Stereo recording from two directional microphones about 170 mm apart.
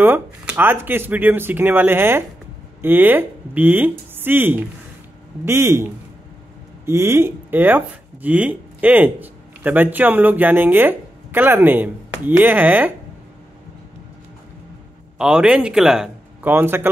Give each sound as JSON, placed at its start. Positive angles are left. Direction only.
{"t": 0.0, "sound": "speech", "side_deg": -10}
{"t": 6.9, "sound": "speech", "side_deg": -15}
{"t": 15.1, "sound": "a man's voice", "side_deg": -5}